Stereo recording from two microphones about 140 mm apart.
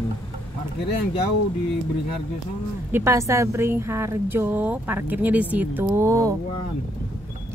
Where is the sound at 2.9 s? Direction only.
20° right (ahead or behind).